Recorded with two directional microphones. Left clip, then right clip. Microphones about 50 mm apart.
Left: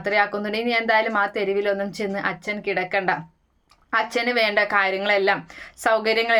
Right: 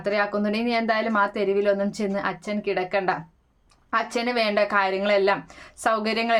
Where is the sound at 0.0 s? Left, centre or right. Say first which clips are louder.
Left 2 dB; right.